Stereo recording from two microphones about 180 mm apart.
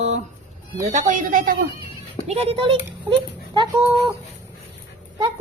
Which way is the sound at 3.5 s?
25° right (ahead or behind).